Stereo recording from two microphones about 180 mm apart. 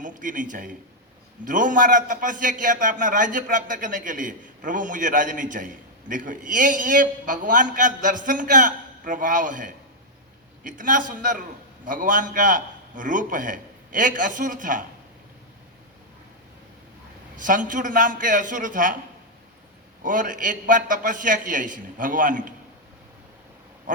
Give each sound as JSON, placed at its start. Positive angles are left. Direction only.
{"t": 0.0, "sound": "a man's voice", "side_deg": -45}
{"t": 17.3, "sound": "a man's voice", "side_deg": -45}
{"t": 20.0, "sound": "a man's voice", "side_deg": -50}